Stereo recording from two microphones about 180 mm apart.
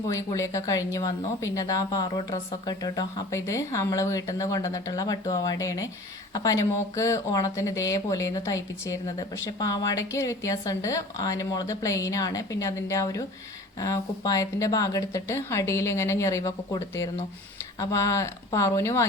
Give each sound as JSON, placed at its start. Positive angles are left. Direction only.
{"t": 0.1, "sound": "speech", "side_deg": 15}